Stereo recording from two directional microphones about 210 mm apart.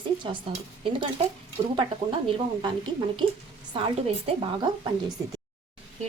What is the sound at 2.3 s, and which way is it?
Speech, 25° right (ahead or behind).